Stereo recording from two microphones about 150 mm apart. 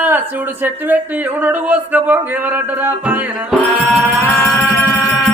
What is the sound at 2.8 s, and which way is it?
Music, 5° right (ahead or behind).